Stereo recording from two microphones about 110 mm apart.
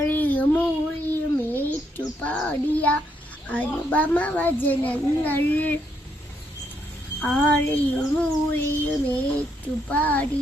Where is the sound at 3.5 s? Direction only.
15° left (ahead or behind).